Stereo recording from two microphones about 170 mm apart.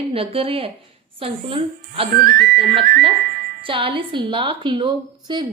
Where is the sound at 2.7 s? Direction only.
35° right (ahead or behind).